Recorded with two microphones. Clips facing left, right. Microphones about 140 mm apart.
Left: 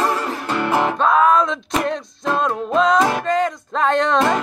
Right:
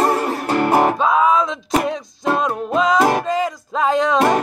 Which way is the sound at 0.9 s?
5° right (ahead or behind).